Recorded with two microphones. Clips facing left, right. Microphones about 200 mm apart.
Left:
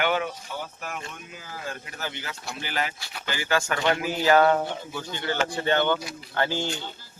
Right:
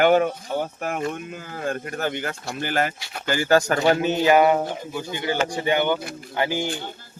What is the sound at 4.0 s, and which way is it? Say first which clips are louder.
Speech: even; 25° right (ahead or behind).